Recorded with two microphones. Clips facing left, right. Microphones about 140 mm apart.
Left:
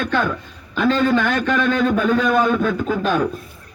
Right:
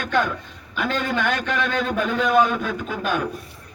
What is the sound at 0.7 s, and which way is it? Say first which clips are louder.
A man's voice: left 7 dB; 45° left (ahead or behind).